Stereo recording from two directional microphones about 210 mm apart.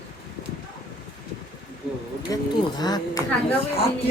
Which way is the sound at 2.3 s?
20° left (ahead or behind).